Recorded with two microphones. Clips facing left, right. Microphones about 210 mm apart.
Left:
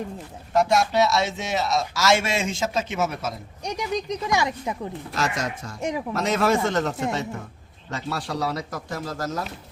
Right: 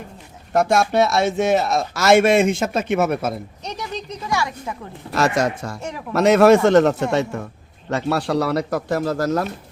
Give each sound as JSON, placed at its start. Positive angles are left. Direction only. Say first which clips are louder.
{"t": 0.5, "sound": "a man's voice", "louder": "right 3 dB", "side_deg": -55}
{"t": 3.6, "sound": "speech", "louder": "left 2 dB", "side_deg": 15}
{"t": 5.1, "sound": "a man's voice", "louder": "right 9 dB", "side_deg": -65}